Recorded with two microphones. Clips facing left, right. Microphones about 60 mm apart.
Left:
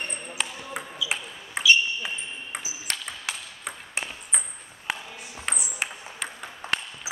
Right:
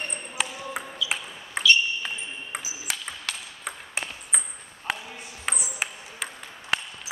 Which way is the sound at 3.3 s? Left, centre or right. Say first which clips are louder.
Left 1 dB; centre.